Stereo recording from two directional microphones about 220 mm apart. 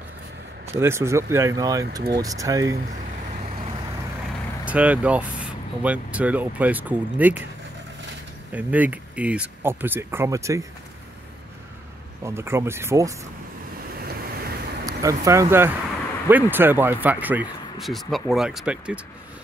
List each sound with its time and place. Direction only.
0.7 s speech: 10° right (ahead or behind)
4.6 s speech: 5° right (ahead or behind)
8.5 s speech: 5° right (ahead or behind)
12.2 s speech: 10° right (ahead or behind)
14.9 s speech: 15° right (ahead or behind)